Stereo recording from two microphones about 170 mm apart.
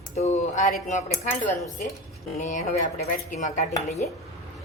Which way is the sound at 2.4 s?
45° left (ahead or behind).